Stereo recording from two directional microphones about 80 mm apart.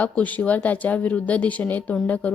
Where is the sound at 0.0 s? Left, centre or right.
Centre.